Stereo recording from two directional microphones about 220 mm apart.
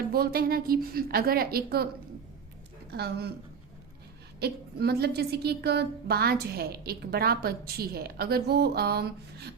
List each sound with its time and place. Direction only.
0.1 s a woman's voice: 45° right (ahead or behind)
2.9 s a woman's voice: 45° right (ahead or behind)
4.4 s a woman's voice: 45° right (ahead or behind)